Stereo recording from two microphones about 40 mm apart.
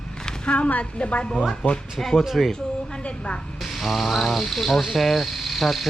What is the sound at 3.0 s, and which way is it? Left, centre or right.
Speech, left.